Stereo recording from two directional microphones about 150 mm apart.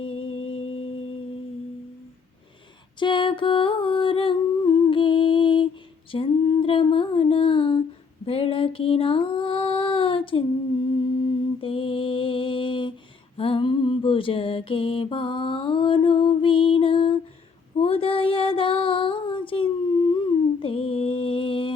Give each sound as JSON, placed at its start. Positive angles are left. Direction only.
{"t": 0.0, "sound": "music", "side_deg": 40}
{"t": 3.0, "sound": "humming", "side_deg": 35}
{"t": 6.1, "sound": "female singing", "side_deg": 35}
{"t": 11.6, "sound": "mantra", "side_deg": 35}
{"t": 17.7, "sound": "female singing", "side_deg": 40}